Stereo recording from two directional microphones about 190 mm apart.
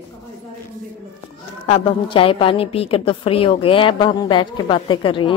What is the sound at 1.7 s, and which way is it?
A woman's voice, 30° left (ahead or behind).